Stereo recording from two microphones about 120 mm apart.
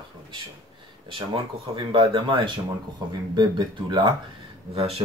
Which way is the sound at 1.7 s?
45° right (ahead or behind).